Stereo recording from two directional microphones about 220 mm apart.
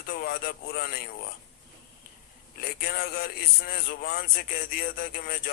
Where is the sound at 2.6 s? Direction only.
45° left (ahead or behind).